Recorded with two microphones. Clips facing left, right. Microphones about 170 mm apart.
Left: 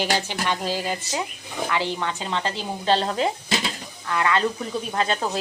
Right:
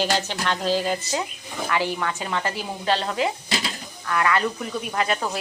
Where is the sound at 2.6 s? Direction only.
30° left (ahead or behind).